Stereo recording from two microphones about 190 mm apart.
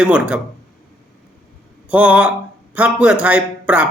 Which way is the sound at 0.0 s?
5° right (ahead or behind).